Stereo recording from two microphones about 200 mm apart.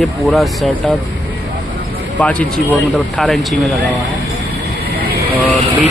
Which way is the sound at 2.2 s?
5° left (ahead or behind).